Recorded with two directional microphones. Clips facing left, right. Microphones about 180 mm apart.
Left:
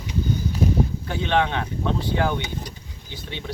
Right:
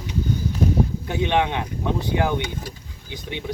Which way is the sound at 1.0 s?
15° right (ahead or behind).